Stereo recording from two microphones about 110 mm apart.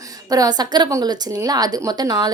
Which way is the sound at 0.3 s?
35° right (ahead or behind).